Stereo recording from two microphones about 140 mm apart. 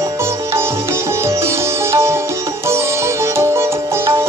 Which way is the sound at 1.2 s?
20° right (ahead or behind).